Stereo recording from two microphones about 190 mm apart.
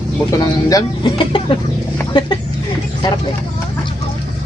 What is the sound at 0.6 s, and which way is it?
Speech, 25° left (ahead or behind).